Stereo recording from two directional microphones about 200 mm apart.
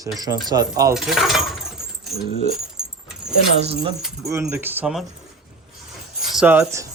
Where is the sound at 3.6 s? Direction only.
30° right (ahead or behind).